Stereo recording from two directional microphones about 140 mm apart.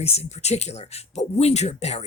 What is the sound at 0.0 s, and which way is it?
Speech, 50° left (ahead or behind).